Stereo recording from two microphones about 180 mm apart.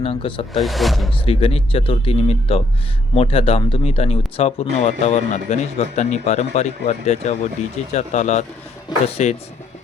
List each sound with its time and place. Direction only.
0.0 s speech: 30° left (ahead or behind)
0.5 s speech: centre (ahead or behind)
1.2 s speech: 30° left (ahead or behind)